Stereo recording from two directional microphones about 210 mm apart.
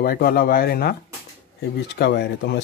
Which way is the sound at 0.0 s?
45° left (ahead or behind).